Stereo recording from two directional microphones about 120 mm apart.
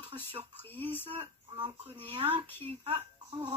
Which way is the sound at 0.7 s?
15° left (ahead or behind).